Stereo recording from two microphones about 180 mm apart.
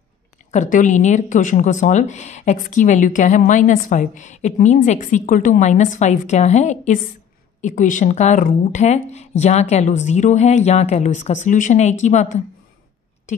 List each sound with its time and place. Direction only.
0.5 s speech: 45° left (ahead or behind)